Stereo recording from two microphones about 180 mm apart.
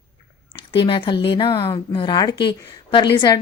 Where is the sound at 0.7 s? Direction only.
30° left (ahead or behind).